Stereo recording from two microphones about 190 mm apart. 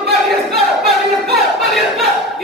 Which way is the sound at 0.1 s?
Centre (ahead or behind).